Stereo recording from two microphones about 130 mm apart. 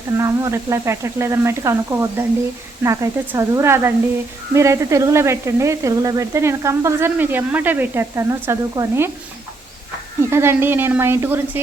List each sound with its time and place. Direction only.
0.2 s speech: 25° right (ahead or behind)
10.2 s a woman's voice: 20° right (ahead or behind)